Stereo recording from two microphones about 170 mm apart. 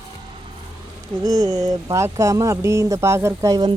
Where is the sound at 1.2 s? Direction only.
20° right (ahead or behind).